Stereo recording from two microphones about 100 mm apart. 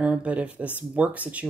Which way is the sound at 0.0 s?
10° right (ahead or behind).